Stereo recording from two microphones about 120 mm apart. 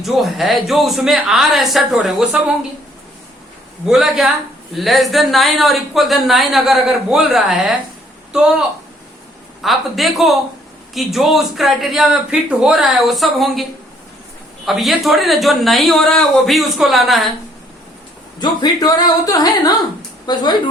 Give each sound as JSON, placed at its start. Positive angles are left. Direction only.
{"t": 0.0, "sound": "speech", "side_deg": 0}
{"t": 3.8, "sound": "a woman's voice", "side_deg": -5}
{"t": 9.6, "sound": "speech", "side_deg": 0}
{"t": 18.3, "sound": "a woman's voice", "side_deg": 35}